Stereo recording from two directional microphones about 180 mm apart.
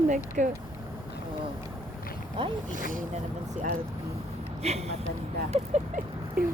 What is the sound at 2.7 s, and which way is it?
Speech, 50° right (ahead or behind).